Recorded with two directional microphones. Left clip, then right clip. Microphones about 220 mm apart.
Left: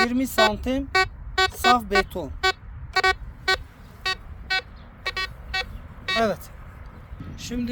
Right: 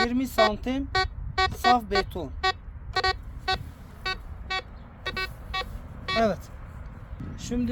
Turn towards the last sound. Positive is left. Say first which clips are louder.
# even
turn(degrees=40)  # may be behind; listen again after turning